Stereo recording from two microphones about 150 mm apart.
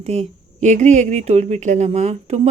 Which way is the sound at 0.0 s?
45° right (ahead or behind).